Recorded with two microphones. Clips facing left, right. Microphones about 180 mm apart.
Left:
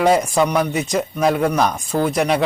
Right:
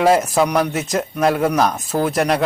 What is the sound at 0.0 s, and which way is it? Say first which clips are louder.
Speech: right 1 dB; 5° right (ahead or behind).